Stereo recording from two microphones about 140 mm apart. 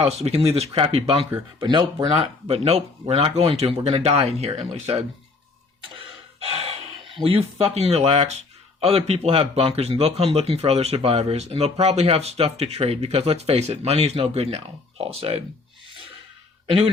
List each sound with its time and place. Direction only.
0.0 s speech: 50° right (ahead or behind)
1.5 s speech: 30° right (ahead or behind)
2.5 s speech: 45° right (ahead or behind)
5.8 s a sound: 45° right (ahead or behind)
8.8 s speech: 45° right (ahead or behind)